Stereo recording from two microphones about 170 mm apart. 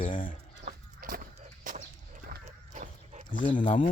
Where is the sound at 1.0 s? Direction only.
55° right (ahead or behind).